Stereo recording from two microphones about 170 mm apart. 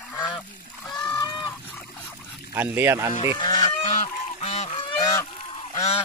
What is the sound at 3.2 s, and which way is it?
Goose, 30° left (ahead or behind).